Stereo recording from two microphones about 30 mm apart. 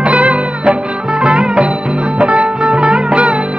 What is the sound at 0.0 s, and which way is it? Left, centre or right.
Music, right.